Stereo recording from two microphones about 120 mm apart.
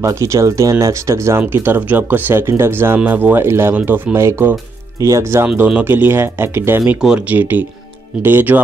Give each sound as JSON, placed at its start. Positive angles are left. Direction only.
{"t": 0.0, "sound": "speech", "side_deg": -25}
{"t": 6.8, "sound": "speech", "side_deg": -5}